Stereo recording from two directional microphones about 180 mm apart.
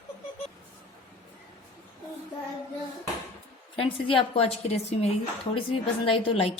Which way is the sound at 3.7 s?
30° left (ahead or behind).